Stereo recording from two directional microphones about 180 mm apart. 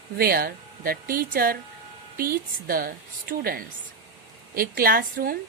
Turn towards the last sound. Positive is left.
turn(degrees=-55)  # may be behind; listen again after turning